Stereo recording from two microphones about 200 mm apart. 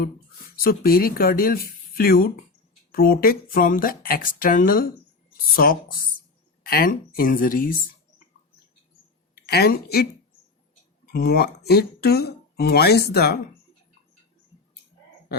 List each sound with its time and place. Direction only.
0.0 s speech: 50° left (ahead or behind)
9.3 s speech: 50° left (ahead or behind)